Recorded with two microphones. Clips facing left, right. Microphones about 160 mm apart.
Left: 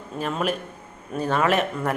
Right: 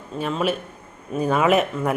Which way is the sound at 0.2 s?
Centre (ahead or behind).